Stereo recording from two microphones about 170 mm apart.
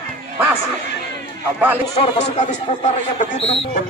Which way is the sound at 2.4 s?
45° left (ahead or behind).